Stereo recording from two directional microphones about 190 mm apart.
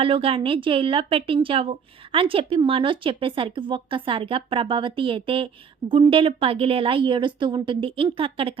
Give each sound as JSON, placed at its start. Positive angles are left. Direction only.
{"t": 0.0, "sound": "a woman's voice", "side_deg": -30}